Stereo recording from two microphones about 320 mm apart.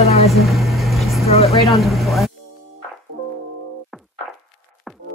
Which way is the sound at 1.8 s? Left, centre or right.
Centre.